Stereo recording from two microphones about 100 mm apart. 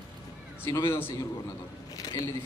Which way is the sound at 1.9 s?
40° left (ahead or behind).